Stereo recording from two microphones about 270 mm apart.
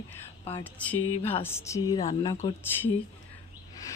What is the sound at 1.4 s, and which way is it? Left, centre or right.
Speech, centre.